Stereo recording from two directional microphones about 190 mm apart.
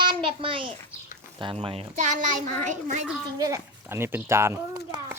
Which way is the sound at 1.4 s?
25° right (ahead or behind).